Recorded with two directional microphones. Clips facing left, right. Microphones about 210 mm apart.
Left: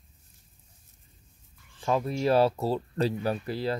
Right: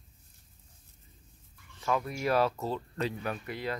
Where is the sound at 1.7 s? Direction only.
30° left (ahead or behind).